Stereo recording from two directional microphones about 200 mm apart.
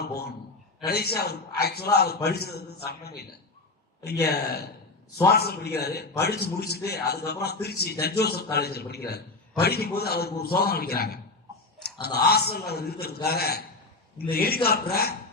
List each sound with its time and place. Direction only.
0.0 s a man's voice: 50° left (ahead or behind)